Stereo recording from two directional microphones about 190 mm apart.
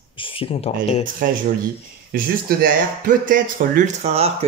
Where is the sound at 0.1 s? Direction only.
25° left (ahead or behind).